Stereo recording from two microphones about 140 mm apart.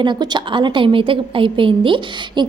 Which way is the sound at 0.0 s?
30° right (ahead or behind).